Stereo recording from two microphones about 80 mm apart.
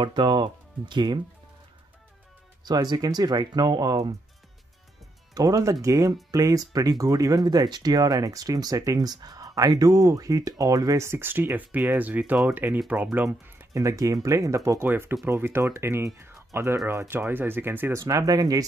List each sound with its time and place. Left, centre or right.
0.0 s speech: right
2.6 s speech: right
5.3 s speech: right
11.1 s speech: right
13.7 s speech: right
14.9 s speech: right
18.0 s speech: right